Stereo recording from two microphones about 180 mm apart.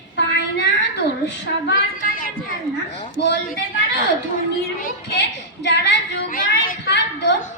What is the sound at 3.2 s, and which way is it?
Female singing, 70° left (ahead or behind).